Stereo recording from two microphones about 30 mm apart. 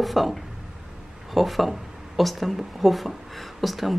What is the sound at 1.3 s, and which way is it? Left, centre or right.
Speech, centre.